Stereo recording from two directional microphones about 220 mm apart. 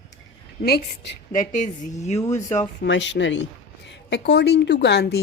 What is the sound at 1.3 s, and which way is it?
Speech, 35° left (ahead or behind).